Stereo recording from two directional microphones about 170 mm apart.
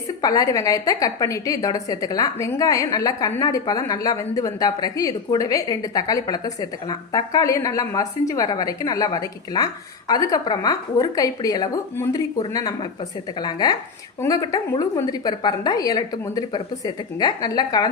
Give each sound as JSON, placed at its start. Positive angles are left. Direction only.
{"t": 0.2, "sound": "a woman's voice", "side_deg": 20}